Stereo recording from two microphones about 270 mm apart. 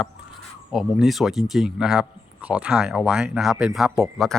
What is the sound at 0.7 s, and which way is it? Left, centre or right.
Speech, centre.